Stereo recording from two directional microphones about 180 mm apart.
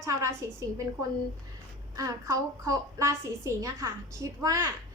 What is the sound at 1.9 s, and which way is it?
A woman's voice, 20° right (ahead or behind).